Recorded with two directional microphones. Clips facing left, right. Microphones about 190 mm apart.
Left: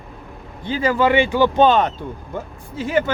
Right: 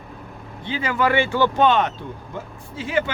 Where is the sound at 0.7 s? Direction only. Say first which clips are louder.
Left 6 dB; 40° left (ahead or behind).